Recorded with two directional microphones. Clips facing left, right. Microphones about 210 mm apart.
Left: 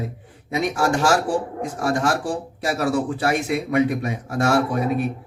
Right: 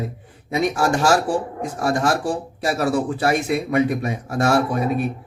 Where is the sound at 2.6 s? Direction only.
35° right (ahead or behind).